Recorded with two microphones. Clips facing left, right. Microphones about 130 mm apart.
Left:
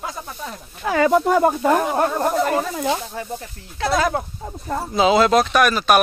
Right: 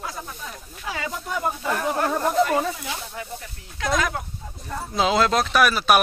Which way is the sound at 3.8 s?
30° left (ahead or behind).